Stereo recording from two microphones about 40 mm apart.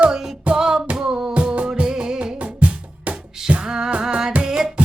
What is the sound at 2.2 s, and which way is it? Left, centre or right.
Music, right.